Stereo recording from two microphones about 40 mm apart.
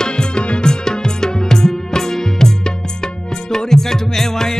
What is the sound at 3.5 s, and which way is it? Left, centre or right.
Music, centre.